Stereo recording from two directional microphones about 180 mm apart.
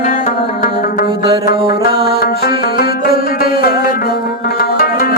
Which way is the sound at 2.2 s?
55° left (ahead or behind).